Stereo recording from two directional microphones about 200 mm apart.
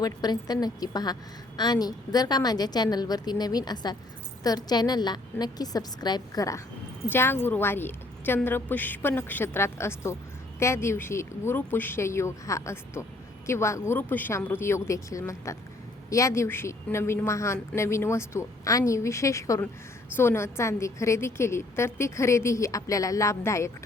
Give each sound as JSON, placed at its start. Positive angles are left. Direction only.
{"t": 0.0, "sound": "a woman's voice", "side_deg": 20}